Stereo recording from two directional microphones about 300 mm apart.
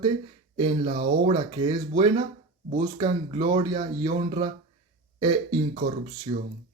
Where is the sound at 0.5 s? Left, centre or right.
Centre.